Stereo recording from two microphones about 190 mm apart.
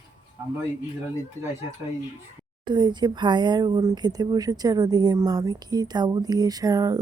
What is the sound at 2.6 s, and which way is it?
Speech, 25° right (ahead or behind).